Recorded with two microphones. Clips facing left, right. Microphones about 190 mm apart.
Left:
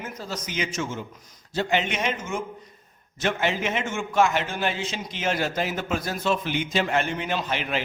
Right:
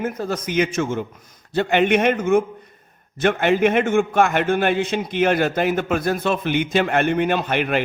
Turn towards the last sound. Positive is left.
turn(degrees=-55)  # may be behind; listen again after turning